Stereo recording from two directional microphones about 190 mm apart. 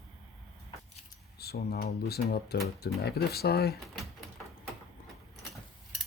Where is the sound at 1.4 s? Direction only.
55° left (ahead or behind).